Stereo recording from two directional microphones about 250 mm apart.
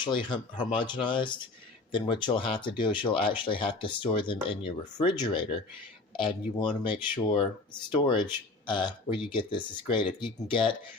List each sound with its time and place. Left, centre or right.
0.0 s speech: centre